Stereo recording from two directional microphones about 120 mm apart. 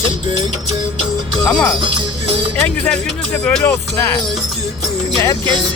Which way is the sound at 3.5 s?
15° left (ahead or behind).